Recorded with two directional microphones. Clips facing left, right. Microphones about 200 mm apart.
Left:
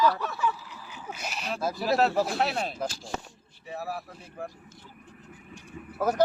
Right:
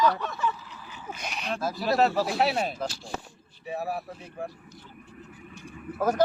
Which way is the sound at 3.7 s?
15° right (ahead or behind).